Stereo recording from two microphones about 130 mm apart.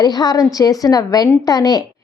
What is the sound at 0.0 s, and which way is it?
A woman's voice, 30° left (ahead or behind).